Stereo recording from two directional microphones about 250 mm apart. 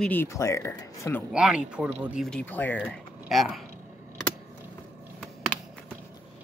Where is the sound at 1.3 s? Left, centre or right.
Centre.